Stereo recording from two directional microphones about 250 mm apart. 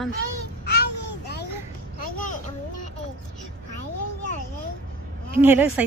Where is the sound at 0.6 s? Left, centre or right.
Left.